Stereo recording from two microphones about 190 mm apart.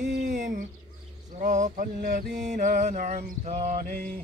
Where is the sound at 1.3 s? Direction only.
40° right (ahead or behind).